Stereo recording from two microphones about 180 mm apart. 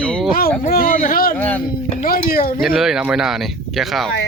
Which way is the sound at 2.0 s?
50° left (ahead or behind).